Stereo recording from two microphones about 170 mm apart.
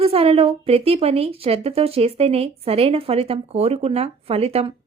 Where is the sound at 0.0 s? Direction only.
35° right (ahead or behind).